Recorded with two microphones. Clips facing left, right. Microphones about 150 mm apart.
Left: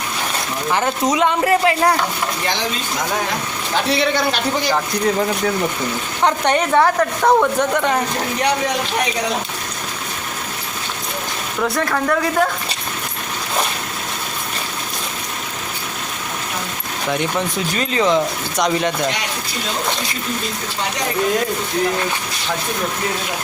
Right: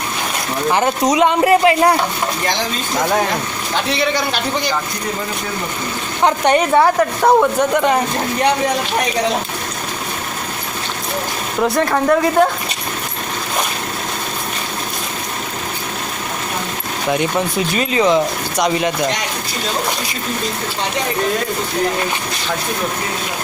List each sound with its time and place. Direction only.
0.7 s a woman's voice: 15° right (ahead or behind)
6.2 s a woman's voice: 10° right (ahead or behind)
11.6 s speech: 30° right (ahead or behind)
17.1 s a woman's voice: 10° right (ahead or behind)